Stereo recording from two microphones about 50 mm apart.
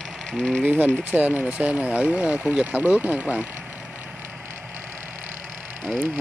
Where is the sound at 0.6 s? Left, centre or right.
Right.